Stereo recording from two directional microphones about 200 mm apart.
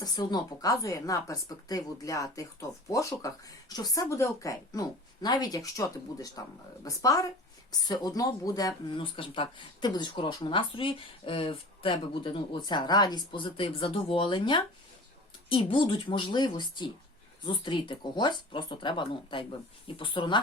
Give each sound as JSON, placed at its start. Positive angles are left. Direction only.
{"t": 0.0, "sound": "speech", "side_deg": 20}